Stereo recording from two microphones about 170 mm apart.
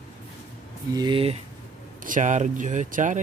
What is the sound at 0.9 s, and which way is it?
Speech, 30° right (ahead or behind).